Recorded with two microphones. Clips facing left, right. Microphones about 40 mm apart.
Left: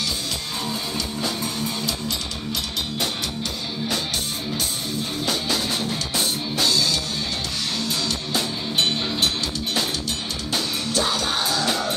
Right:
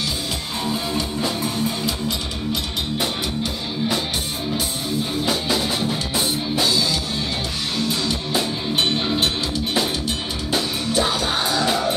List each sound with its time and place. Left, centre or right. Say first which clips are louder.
0.7 s music: right 6 dB; centre
5.2 s music: right 1 dB; centre